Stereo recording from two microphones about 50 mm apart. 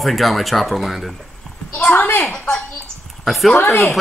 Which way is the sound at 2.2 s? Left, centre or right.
Centre.